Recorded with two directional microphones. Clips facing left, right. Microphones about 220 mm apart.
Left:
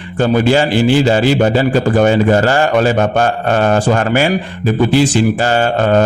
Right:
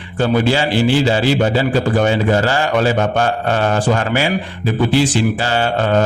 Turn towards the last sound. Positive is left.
turn(degrees=45)  # may be behind; listen again after turning